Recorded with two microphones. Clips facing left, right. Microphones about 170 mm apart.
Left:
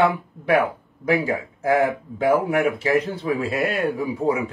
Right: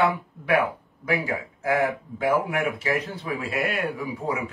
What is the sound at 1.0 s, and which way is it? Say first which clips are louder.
Speech: left 5 dB; 30° left (ahead or behind).